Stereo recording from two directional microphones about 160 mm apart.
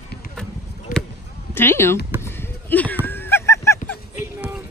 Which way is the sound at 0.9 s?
60° left (ahead or behind).